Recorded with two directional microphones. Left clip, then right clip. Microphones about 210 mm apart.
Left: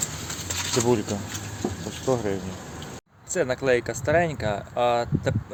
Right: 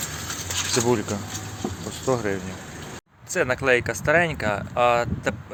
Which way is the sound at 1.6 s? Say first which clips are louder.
Left 2 dB; 40° right (ahead or behind).